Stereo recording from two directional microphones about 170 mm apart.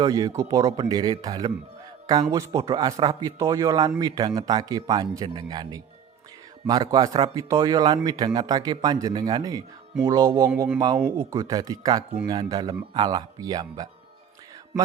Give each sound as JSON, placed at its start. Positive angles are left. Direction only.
{"t": 0.0, "sound": "speech", "side_deg": -20}